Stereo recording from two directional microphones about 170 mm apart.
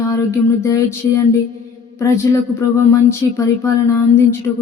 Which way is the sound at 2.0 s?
20° left (ahead or behind).